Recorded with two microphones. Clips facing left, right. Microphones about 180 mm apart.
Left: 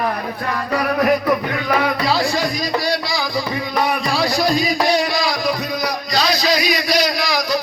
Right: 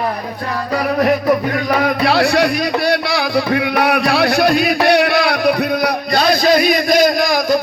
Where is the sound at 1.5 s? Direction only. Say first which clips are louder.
Right 3 dB; 45° right (ahead or behind).